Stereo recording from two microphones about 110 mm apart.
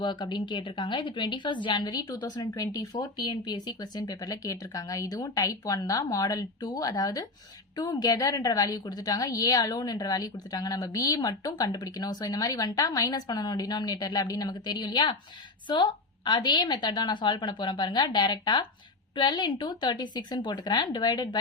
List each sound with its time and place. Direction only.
0.0 s a woman's voice: 45° left (ahead or behind)